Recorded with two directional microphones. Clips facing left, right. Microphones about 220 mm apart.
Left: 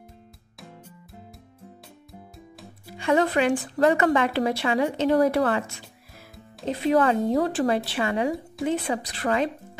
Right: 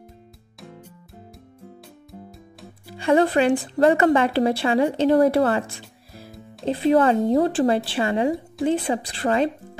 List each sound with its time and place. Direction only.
2.9 s a woman's voice: 30° right (ahead or behind)
6.6 s a woman's voice: 30° right (ahead or behind)